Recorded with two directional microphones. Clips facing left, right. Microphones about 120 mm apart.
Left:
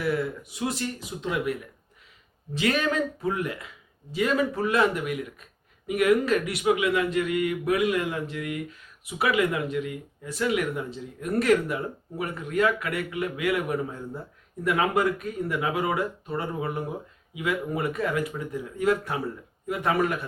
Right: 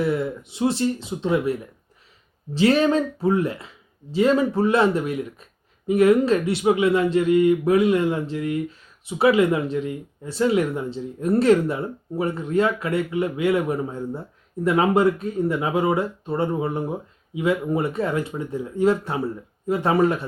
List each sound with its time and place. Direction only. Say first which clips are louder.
0.0 s speech: right 4 dB; 25° right (ahead or behind)
2.6 s speech: right 7 dB; 30° right (ahead or behind)